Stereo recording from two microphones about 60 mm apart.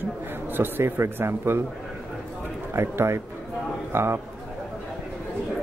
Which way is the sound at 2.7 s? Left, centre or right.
Right.